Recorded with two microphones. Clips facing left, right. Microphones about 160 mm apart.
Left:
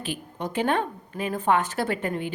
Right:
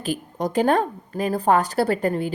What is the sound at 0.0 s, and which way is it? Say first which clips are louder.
A woman's voice: right 6 dB; 40° right (ahead or behind).